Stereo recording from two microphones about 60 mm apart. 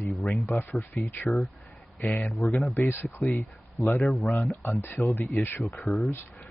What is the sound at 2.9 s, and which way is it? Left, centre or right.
Speech, left.